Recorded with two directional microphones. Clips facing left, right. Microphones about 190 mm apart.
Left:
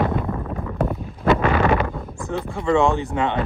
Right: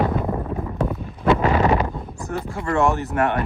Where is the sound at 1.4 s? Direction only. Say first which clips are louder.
Even; 20° right (ahead or behind).